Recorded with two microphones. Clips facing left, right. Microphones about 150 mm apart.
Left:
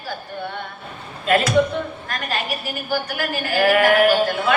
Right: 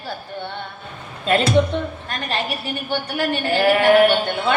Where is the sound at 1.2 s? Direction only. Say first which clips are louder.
Even; 30° right (ahead or behind).